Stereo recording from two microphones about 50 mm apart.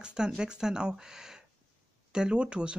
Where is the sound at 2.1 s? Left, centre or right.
Centre.